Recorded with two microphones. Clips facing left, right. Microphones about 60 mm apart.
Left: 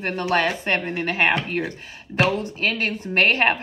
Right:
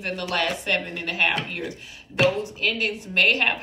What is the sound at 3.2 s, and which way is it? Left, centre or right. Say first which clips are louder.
Speech: left 3 dB; left.